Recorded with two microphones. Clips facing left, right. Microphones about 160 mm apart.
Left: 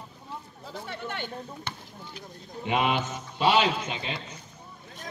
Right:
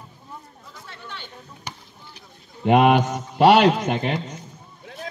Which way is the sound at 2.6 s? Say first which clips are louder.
Right 10 dB; 55° right (ahead or behind).